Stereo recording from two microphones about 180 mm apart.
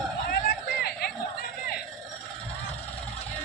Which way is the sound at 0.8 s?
60° left (ahead or behind).